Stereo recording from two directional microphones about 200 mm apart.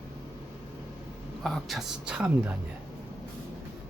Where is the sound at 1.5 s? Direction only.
Centre (ahead or behind).